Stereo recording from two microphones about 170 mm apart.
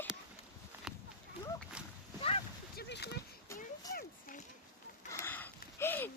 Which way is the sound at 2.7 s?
75° left (ahead or behind).